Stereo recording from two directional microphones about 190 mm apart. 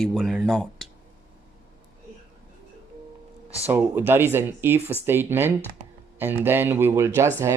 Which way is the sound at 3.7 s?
10° right (ahead or behind).